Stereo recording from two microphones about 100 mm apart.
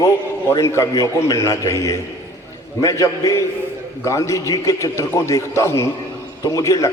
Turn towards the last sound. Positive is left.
turn(degrees=30)  # may be behind; listen again after turning